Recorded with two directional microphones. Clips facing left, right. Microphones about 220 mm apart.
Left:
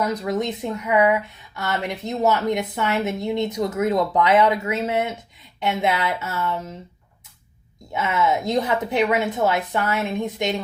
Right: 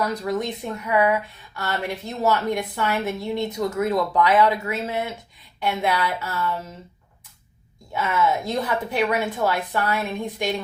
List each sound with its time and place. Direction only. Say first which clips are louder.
0.0 s a woman's voice: left 1 dB; 20° left (ahead or behind)
7.9 s a woman's voice: left 1 dB; 20° left (ahead or behind)